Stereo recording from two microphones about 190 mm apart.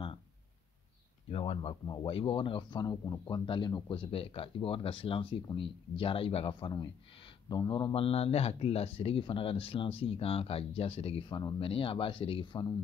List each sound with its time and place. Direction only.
1.3 s a man's voice: 30° left (ahead or behind)